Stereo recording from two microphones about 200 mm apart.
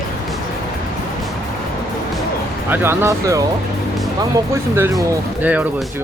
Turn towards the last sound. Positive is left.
turn(degrees=-10)  # may be behind; listen again after turning